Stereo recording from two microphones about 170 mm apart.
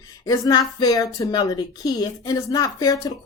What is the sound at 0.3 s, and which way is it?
A woman's voice, 25° left (ahead or behind).